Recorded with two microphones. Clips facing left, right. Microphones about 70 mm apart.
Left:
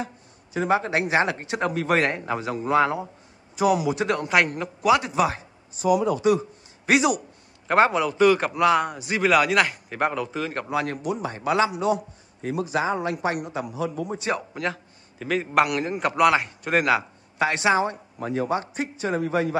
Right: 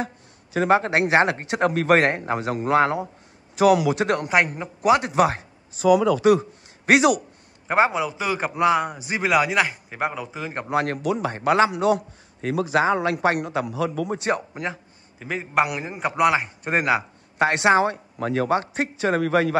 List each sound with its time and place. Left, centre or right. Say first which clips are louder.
0.7 s speech: right 4 dB; right
3.5 s speech: right 4 dB; right
4.0 s speech: right 2 dB; right
4.8 s a man's voice: right 1 dB; right
5.1 s speech: right 3 dB; right
5.8 s speech: right 4 dB; right
6.9 s speech: right 3 dB; right
7.6 s a man's voice: left 1 dB; centre
10.7 s speech: right 5 dB; right
11.0 s speech: right 4 dB; right
11.3 s speech: right 3 dB; right
11.7 s speech: right 3 dB; right
14.5 s a man's voice: left 1 dB; centre
17.4 s speech: right 3 dB; right